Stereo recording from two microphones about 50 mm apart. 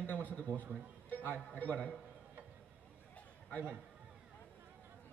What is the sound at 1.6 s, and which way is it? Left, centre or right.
Speech, left.